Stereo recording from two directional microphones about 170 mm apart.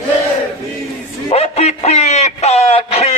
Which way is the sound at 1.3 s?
40° left (ahead or behind).